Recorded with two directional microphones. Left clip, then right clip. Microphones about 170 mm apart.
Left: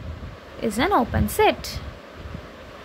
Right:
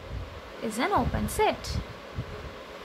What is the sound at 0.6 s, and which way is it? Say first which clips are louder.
A woman's voice: left 6 dB; 30° left (ahead or behind).